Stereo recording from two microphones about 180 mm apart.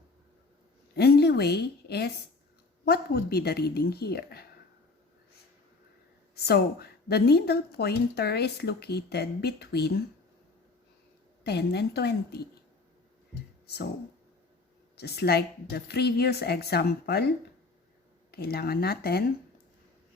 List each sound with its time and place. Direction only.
0.9 s a woman's voice: 60° left (ahead or behind)
6.3 s a woman's voice: 60° left (ahead or behind)
11.4 s a woman's voice: 65° left (ahead or behind)
14.9 s a woman's voice: 60° left (ahead or behind)
18.3 s a woman's voice: 60° left (ahead or behind)